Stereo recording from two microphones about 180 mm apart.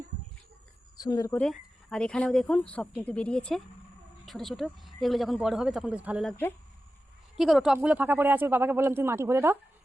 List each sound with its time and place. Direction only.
0.9 s speech: 20° left (ahead or behind)
1.3 s speech: 5° left (ahead or behind)
7.3 s speech: centre (ahead or behind)